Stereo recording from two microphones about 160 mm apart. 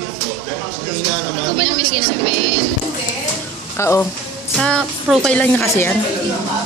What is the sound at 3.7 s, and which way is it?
Speech, 15° left (ahead or behind).